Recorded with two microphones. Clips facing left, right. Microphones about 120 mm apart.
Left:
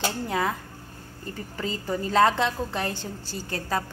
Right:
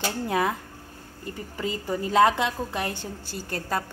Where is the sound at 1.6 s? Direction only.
15° right (ahead or behind).